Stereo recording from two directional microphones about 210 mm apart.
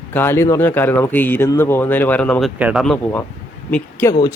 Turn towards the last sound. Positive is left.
turn(degrees=15)  # may be behind; listen again after turning